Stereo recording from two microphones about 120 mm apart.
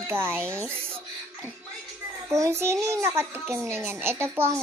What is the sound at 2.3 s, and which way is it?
Speech, 25° right (ahead or behind).